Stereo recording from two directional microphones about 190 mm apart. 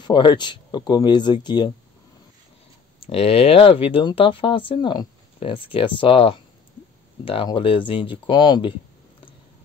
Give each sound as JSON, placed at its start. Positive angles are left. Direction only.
{"t": 0.0, "sound": "speech", "side_deg": 25}
{"t": 3.0, "sound": "speech", "side_deg": 30}